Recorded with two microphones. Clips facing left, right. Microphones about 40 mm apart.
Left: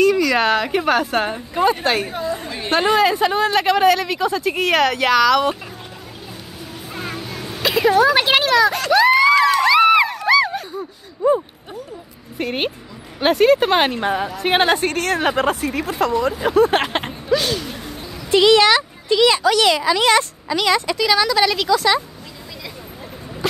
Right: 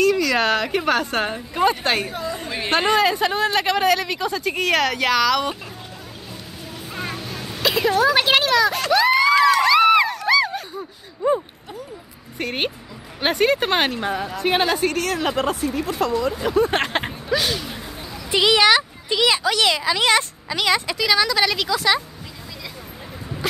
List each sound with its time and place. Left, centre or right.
0.0 s speech: centre
6.9 s a sound: centre
8.9 s crowd: centre
12.4 s speech: centre
14.4 s a woman's voice: left
15.5 s speech: left
16.0 s a woman's voice: left
16.3 s speech: centre
16.7 s speech: centre
19.9 s speech: centre
20.9 s speech: centre